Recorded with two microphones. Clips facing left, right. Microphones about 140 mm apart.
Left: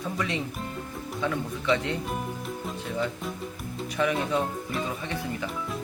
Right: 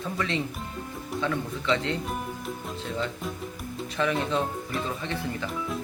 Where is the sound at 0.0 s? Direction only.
15° left (ahead or behind).